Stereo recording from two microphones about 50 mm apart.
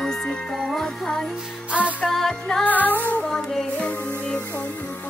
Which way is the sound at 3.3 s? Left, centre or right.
Centre.